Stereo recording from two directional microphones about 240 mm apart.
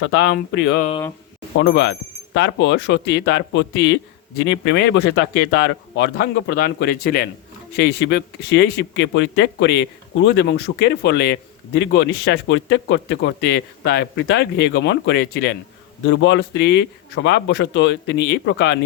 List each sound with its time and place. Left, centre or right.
0.1 s speech: left